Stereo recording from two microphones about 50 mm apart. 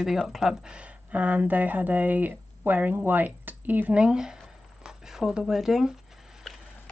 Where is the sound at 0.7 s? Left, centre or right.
Right.